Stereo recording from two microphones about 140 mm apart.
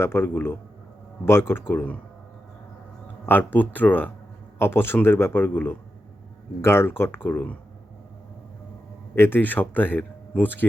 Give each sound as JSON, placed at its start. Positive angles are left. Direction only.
{"t": 0.0, "sound": "speech", "side_deg": 15}
{"t": 3.2, "sound": "speech", "side_deg": 15}
{"t": 9.1, "sound": "speech", "side_deg": 15}